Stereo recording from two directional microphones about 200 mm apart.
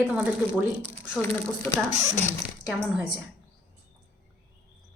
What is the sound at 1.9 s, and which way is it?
Speech, 35° left (ahead or behind).